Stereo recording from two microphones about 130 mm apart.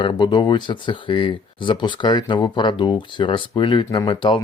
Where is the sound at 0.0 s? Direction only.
35° left (ahead or behind).